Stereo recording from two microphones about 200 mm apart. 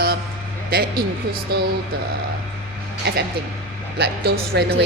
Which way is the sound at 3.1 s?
55° right (ahead or behind).